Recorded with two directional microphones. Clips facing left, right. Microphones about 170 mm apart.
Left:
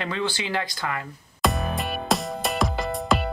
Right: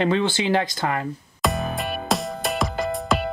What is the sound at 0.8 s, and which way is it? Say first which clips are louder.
Speech: right 5 dB; 40° right (ahead or behind).